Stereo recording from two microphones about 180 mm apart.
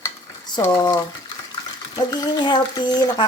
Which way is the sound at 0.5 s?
25° left (ahead or behind).